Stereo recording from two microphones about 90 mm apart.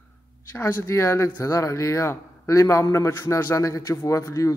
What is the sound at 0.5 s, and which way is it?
A man's voice, 30° left (ahead or behind).